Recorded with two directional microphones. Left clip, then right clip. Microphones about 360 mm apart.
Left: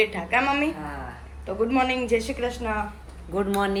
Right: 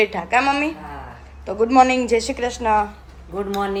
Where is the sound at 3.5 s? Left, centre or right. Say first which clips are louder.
Right 3 dB; centre.